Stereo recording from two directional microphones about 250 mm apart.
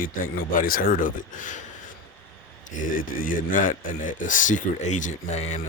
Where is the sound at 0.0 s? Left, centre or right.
Left.